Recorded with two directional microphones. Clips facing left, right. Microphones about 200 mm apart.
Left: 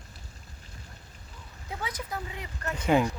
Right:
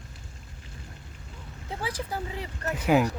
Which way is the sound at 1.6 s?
30° right (ahead or behind).